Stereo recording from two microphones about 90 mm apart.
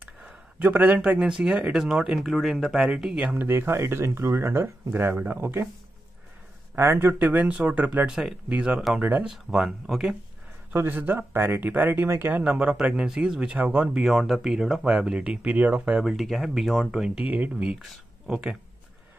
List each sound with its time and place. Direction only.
0.6 s speech: 20° right (ahead or behind)
3.3 s speech: 25° right (ahead or behind)
6.7 s speech: 25° right (ahead or behind)
8.1 s speech: 5° right (ahead or behind)
10.7 s speech: 25° right (ahead or behind)
16.1 s speech: centre (ahead or behind)